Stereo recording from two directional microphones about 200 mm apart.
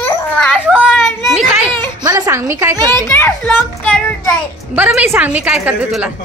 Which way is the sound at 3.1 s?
10° left (ahead or behind).